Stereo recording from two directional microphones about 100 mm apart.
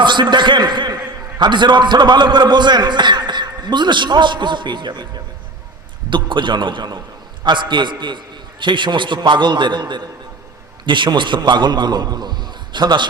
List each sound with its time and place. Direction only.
0.0 s a man's voice: 50° right (ahead or behind)